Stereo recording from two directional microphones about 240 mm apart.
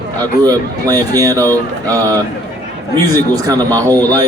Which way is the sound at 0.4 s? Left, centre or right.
Centre.